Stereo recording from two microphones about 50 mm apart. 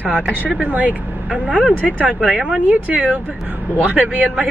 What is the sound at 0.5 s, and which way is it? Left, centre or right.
Speech, right.